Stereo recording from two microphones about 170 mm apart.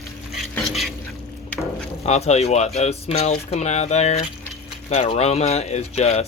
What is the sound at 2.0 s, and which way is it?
Speech, 40° left (ahead or behind).